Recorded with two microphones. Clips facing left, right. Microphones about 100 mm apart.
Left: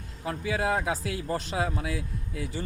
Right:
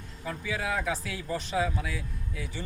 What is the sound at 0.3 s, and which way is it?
Speech, 55° left (ahead or behind).